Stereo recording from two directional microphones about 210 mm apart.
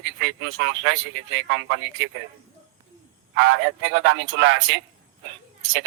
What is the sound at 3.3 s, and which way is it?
A man's voice, 65° right (ahead or behind).